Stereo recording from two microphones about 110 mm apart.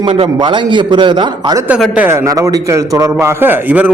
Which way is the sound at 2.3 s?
30° right (ahead or behind).